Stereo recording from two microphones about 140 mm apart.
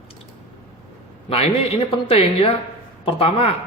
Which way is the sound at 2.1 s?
40° left (ahead or behind).